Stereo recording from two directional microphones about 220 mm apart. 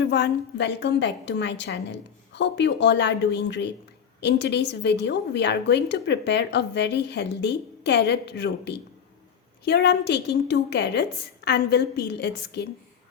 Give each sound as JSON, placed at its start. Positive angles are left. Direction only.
{"t": 0.0, "sound": "a woman's voice", "side_deg": 50}